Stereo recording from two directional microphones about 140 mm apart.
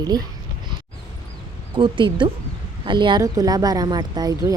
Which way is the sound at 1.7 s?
35° right (ahead or behind).